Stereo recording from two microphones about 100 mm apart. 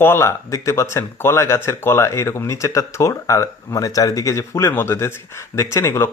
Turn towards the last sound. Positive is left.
turn(degrees=30)  # may be behind; listen again after turning